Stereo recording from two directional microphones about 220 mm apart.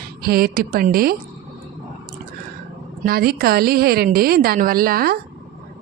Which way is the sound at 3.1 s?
45° right (ahead or behind).